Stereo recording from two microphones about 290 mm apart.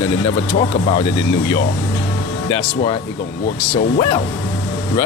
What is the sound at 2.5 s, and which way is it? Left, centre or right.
Speech, centre.